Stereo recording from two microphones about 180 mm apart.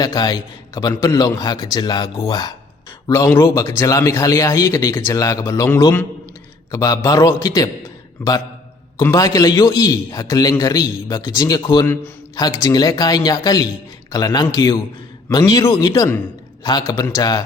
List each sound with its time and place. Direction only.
0.0 s a man's voice: 20° left (ahead or behind)